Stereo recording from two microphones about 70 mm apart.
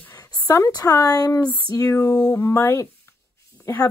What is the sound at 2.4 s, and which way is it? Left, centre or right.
Speech, left.